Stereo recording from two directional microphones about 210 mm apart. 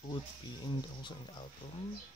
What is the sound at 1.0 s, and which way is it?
Speech, 20° left (ahead or behind).